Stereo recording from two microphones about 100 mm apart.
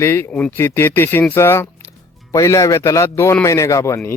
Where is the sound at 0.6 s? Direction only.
20° left (ahead or behind).